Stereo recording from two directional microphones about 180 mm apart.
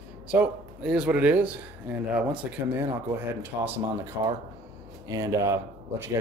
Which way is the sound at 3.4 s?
10° right (ahead or behind).